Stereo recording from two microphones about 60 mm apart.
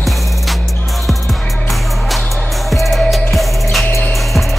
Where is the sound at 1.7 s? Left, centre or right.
Centre.